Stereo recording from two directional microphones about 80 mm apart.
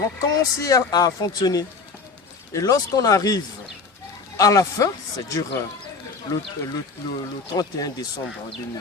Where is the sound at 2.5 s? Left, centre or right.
Left.